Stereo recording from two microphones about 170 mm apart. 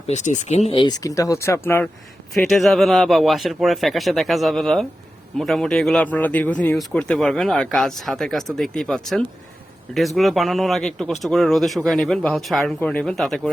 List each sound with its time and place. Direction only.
0.1 s speech: 45° left (ahead or behind); by 1.9 s 15° left (ahead or behind)
2.3 s speech: centre (ahead or behind)